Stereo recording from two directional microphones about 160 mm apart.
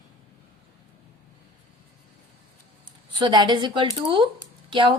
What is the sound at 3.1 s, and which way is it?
A woman's voice, 30° right (ahead or behind).